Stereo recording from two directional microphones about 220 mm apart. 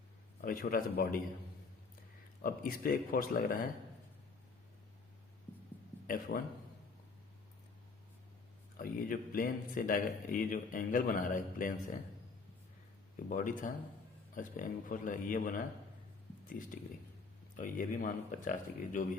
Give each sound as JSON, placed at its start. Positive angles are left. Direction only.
{"t": 0.4, "sound": "speech", "side_deg": 40}
{"t": 2.4, "sound": "speech", "side_deg": 40}
{"t": 6.1, "sound": "speech", "side_deg": 40}
{"t": 8.8, "sound": "speech", "side_deg": 40}
{"t": 13.1, "sound": "speech", "side_deg": 40}